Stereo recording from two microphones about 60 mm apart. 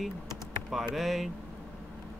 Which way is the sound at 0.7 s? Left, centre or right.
Centre.